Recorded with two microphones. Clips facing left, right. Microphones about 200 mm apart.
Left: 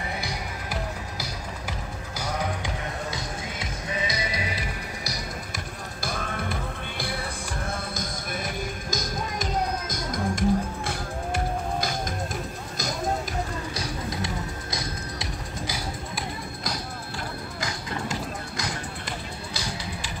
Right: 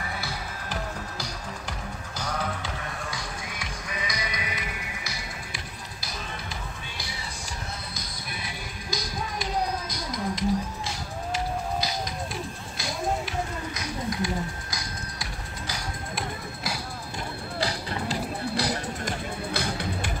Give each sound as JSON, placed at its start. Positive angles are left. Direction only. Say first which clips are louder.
{"t": 0.2, "sound": "music", "louder": "left 2 dB", "side_deg": 15}
{"t": 2.1, "sound": "music", "louder": "left 2 dB", "side_deg": 10}
{"t": 6.0, "sound": "music", "louder": "left 7 dB", "side_deg": 55}
{"t": 13.7, "sound": "music", "louder": "right 3 dB", "side_deg": 25}
{"t": 15.6, "sound": "music", "louder": "left 1 dB", "side_deg": 10}
{"t": 17.6, "sound": "music", "louder": "right 4 dB", "side_deg": -35}
{"t": 19.5, "sound": "music", "louder": "right 4 dB", "side_deg": -55}